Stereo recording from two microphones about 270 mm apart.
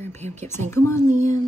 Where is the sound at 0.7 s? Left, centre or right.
Centre.